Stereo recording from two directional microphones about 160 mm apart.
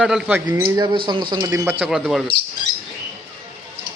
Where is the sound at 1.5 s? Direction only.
15° right (ahead or behind).